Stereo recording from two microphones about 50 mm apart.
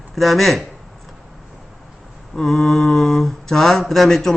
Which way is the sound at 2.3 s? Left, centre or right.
Centre.